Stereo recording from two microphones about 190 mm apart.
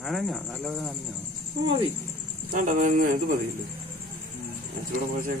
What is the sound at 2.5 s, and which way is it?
Speech, 45° right (ahead or behind).